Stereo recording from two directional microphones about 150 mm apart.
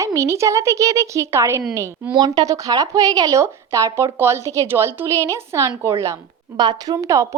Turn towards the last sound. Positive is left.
turn(degrees=-20)  # may be behind; listen again after turning